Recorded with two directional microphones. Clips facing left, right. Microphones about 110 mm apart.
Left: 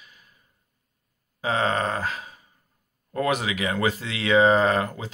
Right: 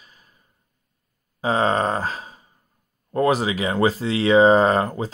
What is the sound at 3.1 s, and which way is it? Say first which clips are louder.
Speech: right 5 dB; 30° right (ahead or behind).